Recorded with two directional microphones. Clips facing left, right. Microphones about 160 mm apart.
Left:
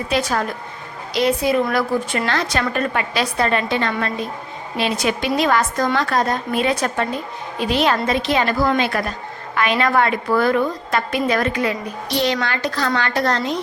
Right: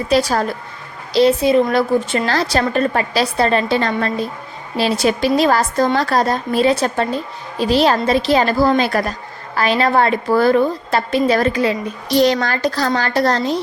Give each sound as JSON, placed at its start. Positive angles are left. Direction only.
{"t": 0.1, "sound": "a woman's voice", "side_deg": -35}